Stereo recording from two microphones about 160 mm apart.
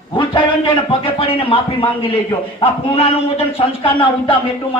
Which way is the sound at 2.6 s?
40° left (ahead or behind).